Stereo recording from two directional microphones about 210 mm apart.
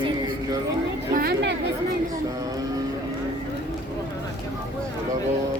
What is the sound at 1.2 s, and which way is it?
Chatter, 50° right (ahead or behind).